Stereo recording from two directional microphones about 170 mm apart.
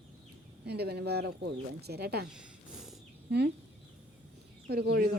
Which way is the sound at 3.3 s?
80° right.